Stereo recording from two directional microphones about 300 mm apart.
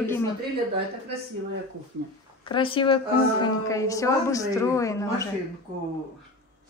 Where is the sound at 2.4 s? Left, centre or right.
Centre.